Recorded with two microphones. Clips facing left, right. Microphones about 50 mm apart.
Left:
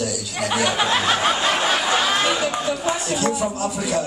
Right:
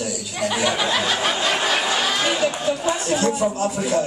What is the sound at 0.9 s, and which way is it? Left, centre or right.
Snicker, left.